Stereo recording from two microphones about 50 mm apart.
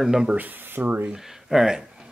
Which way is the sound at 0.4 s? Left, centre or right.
Right.